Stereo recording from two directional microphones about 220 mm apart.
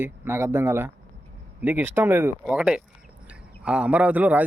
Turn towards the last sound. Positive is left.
turn(degrees=-5)  # may be behind; listen again after turning